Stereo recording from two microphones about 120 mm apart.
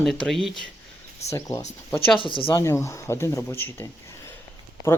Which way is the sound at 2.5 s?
25° left (ahead or behind).